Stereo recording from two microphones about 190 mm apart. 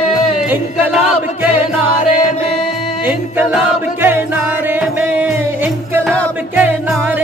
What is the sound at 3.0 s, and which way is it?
Music, 10° right (ahead or behind).